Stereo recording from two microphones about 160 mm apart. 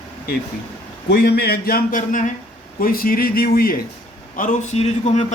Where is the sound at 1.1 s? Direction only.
90° left; by 3.7 s 70° left (ahead or behind).